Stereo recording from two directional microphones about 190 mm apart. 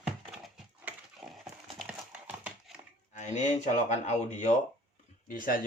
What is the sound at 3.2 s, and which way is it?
Speech, 40° left (ahead or behind).